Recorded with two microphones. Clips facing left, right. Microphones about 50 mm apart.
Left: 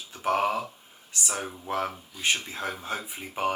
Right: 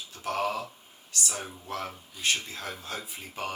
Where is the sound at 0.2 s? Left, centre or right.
Left.